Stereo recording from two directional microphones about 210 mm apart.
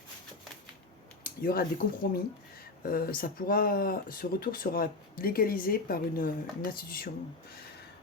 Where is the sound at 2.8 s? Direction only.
45° left (ahead or behind).